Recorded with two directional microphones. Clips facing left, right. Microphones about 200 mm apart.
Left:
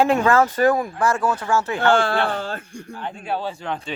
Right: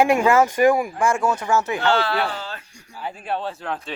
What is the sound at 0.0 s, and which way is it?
Speech, 10° right (ahead or behind).